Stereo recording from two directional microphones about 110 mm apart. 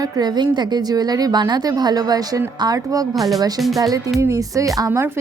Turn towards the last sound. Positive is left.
turn(degrees=-30)  # may be behind; listen again after turning